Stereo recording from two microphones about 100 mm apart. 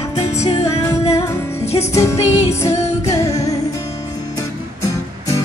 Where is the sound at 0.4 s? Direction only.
90° left.